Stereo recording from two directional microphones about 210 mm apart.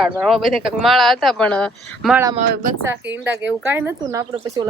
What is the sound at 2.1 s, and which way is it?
Speech, 15° right (ahead or behind).